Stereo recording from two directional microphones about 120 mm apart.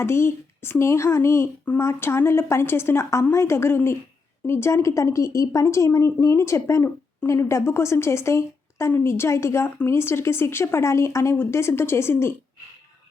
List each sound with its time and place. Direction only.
0.0 s speech: 20° left (ahead or behind)